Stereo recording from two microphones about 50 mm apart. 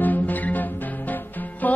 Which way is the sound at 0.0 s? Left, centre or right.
Left.